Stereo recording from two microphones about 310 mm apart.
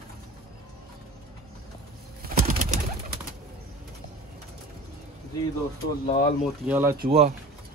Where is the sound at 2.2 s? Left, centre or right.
Right.